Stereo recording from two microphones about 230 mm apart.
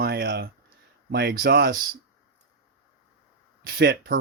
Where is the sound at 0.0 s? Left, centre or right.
Right.